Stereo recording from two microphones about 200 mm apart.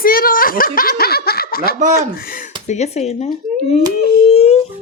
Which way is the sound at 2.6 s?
35° left (ahead or behind).